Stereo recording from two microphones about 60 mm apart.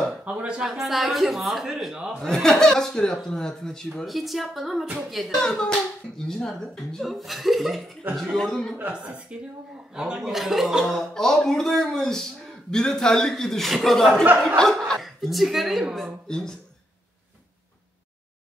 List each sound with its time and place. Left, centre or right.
0.2 s speech: right
0.7 s speech: centre
2.2 s speech: centre
4.8 s speech: centre
5.4 s speech: centre
8.7 s a woman's voice: centre
16.3 s speech: centre